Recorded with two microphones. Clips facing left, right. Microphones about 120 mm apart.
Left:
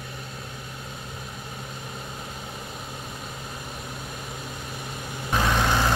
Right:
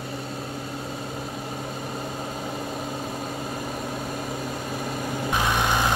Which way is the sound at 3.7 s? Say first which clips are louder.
Right 7 dB; 40° right (ahead or behind).